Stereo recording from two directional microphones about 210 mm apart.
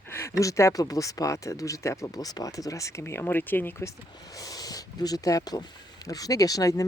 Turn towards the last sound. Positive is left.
turn(degrees=15)  # may be behind; listen again after turning